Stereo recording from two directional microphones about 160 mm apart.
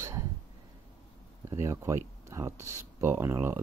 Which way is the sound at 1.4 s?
20° right (ahead or behind).